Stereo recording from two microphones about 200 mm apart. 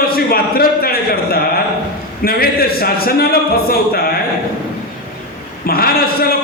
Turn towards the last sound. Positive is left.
turn(degrees=50)  # may be behind; listen again after turning